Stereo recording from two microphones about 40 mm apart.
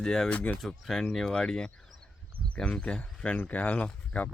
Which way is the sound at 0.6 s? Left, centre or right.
Centre.